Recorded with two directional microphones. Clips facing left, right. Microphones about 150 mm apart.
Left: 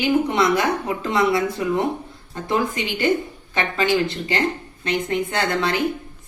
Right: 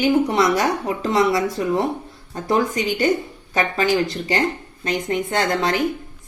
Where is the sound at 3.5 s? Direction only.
40° right (ahead or behind).